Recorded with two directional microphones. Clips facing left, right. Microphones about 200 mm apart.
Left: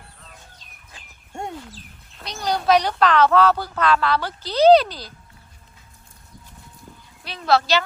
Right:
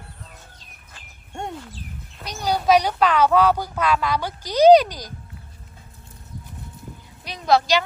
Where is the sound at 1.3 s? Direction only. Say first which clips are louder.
Even; centre (ahead or behind).